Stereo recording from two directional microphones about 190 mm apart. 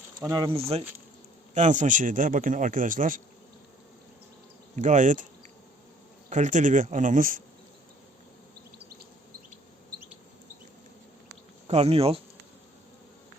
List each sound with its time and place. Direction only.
0.2 s speech: 20° right (ahead or behind)
1.5 s speech: 40° right (ahead or behind)
4.8 s speech: 40° right (ahead or behind)
6.3 s speech: 40° right (ahead or behind)
11.7 s speech: 30° right (ahead or behind)